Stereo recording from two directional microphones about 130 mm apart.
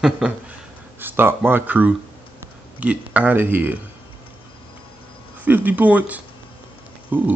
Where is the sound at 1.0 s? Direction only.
15° right (ahead or behind).